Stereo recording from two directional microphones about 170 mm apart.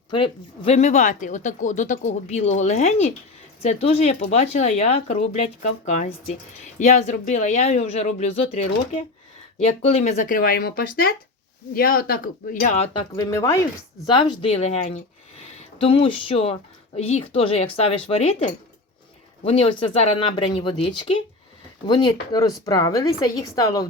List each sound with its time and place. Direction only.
0.1 s speech: 35° left (ahead or behind)
12.9 s a woman's voice: 30° left (ahead or behind)
13.3 s a woman's voice: 20° left (ahead or behind)